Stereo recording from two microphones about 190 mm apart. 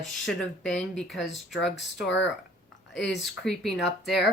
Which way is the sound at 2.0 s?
65° left (ahead or behind).